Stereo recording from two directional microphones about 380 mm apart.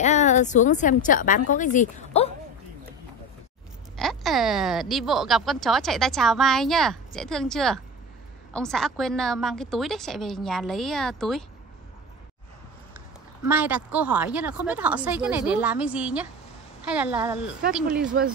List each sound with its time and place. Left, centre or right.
0.0 s a woman's voice: centre
3.9 s a woman's voice: centre
13.5 s a woman's voice: centre